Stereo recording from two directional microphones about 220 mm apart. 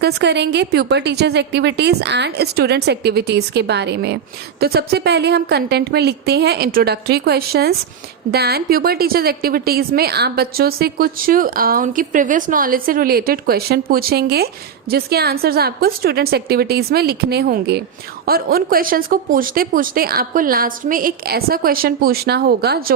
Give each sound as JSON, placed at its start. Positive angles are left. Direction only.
{"t": 0.0, "sound": "a woman's voice", "side_deg": -50}